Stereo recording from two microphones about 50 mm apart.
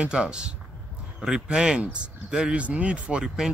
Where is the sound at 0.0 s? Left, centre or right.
Right.